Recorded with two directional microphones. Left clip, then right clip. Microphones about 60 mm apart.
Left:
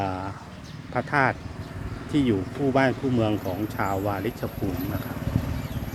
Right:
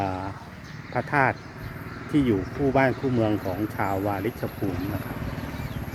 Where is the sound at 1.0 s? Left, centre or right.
Right.